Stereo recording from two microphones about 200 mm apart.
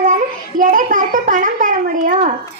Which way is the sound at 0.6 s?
40° right (ahead or behind).